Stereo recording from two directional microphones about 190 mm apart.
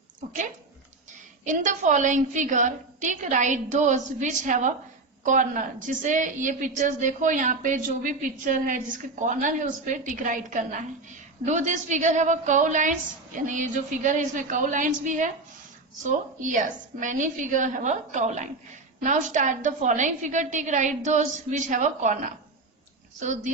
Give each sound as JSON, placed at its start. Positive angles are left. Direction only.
{"t": 1.5, "sound": "a woman's voice", "side_deg": -40}
{"t": 23.2, "sound": "a woman's voice", "side_deg": -40}